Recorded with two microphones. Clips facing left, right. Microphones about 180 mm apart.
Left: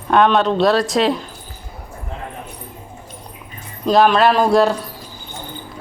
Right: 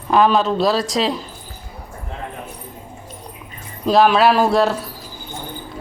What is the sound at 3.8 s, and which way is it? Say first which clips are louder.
Speech: even; centre (ahead or behind).